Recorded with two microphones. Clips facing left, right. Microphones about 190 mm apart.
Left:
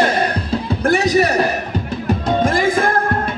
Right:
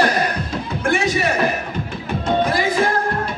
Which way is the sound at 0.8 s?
40° left (ahead or behind).